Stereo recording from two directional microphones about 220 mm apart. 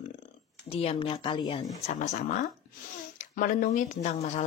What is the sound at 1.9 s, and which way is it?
Speech, 35° left (ahead or behind).